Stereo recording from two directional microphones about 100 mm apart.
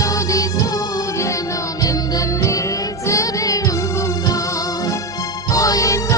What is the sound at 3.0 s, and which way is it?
Music, 30° left (ahead or behind).